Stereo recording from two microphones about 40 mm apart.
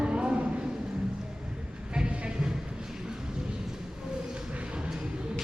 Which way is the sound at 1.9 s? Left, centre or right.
Right.